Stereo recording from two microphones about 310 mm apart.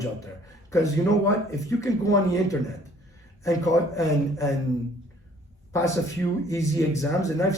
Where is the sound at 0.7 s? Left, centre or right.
Centre.